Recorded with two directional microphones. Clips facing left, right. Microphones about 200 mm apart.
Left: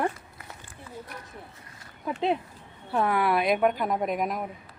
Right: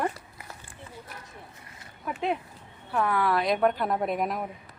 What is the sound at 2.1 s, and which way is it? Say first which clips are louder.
A woman's voice: left 3 dB; 30° left (ahead or behind).